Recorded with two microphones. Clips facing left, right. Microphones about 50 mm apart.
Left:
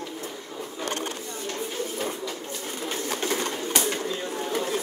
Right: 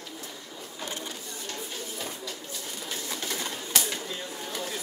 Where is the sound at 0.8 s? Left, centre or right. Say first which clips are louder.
Left 6 dB; left.